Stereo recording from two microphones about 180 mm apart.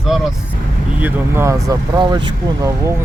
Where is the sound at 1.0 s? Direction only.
10° right (ahead or behind).